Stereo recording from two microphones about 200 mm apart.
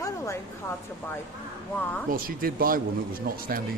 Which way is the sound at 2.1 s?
45° right (ahead or behind).